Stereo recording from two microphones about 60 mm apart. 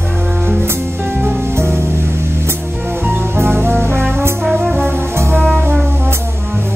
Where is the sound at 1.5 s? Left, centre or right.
Right.